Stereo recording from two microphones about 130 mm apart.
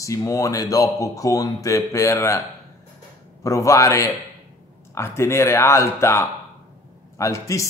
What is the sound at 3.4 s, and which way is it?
A man's voice, 25° left (ahead or behind).